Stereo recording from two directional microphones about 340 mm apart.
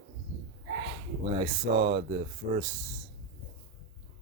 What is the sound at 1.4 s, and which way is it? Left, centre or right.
Speech, centre.